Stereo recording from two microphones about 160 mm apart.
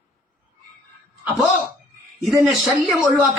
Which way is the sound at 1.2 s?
5° right (ahead or behind).